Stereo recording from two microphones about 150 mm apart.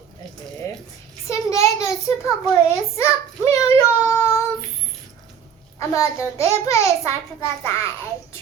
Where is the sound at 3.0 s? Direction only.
20° left (ahead or behind).